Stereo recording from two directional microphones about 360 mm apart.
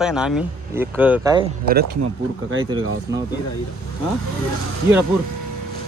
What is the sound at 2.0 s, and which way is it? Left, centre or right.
Speech, right.